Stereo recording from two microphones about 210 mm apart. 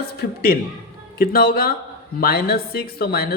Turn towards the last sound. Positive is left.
turn(degrees=45)  # may be behind; listen again after turning